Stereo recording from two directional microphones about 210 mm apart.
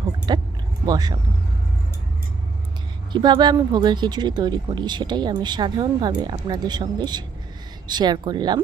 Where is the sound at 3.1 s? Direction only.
20° right (ahead or behind).